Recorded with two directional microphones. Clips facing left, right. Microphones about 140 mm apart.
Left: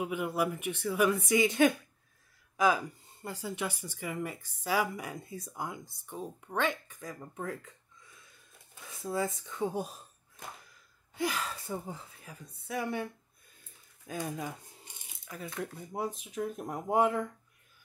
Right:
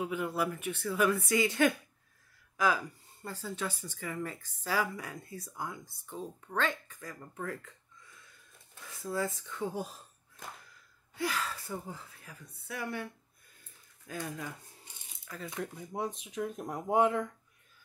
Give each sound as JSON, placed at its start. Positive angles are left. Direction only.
{"t": 0.0, "sound": "speech", "side_deg": 15}
{"t": 8.7, "sound": "speech", "side_deg": 15}
{"t": 11.1, "sound": "speech", "side_deg": 15}